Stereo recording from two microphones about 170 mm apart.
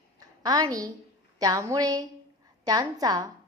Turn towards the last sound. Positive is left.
turn(degrees=-20)  # may be behind; listen again after turning